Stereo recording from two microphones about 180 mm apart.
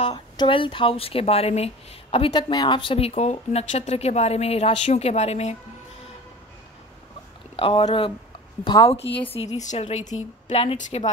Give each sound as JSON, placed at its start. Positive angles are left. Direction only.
{"t": 0.0, "sound": "speech", "side_deg": 25}
{"t": 7.5, "sound": "a woman's voice", "side_deg": 30}